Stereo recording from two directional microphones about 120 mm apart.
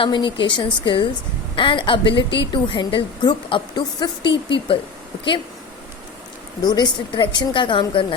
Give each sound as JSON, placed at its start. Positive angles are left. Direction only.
{"t": 0.0, "sound": "a woman's voice", "side_deg": 40}
{"t": 6.6, "sound": "a woman's voice", "side_deg": 35}